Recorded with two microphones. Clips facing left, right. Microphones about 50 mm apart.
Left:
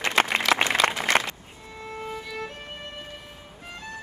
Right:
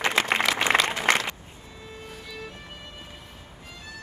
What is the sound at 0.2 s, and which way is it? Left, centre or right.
Applause, left.